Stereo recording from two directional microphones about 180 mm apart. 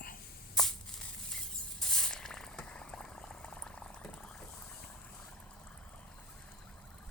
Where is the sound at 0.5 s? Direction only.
Centre (ahead or behind).